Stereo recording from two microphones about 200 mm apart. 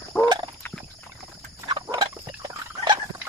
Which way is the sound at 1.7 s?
20° right (ahead or behind).